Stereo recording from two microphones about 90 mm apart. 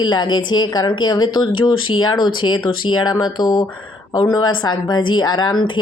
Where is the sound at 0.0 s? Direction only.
55° left (ahead or behind).